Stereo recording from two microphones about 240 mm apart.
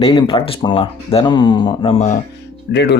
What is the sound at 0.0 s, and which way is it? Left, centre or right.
Speech, left.